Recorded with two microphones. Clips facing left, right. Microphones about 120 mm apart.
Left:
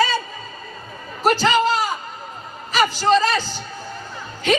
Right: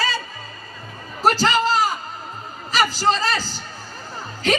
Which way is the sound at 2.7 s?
40° right (ahead or behind).